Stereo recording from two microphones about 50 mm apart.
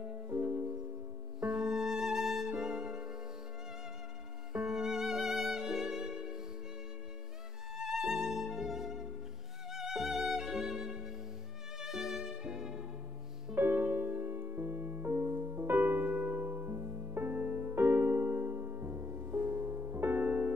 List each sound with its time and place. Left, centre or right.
0.5 s music: right
1.4 s music: centre
4.5 s music: centre
7.7 s music: centre
13.7 s music: right